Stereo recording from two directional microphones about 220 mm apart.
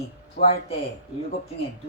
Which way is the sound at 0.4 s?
50° left (ahead or behind).